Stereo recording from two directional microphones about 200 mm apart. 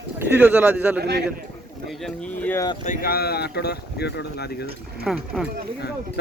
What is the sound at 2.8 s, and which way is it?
Speech, 40° left (ahead or behind).